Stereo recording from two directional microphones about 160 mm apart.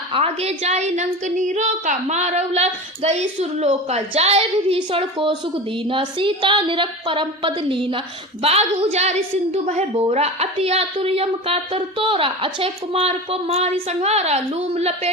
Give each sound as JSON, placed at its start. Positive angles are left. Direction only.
{"t": 0.1, "sound": "a woman's voice", "side_deg": -40}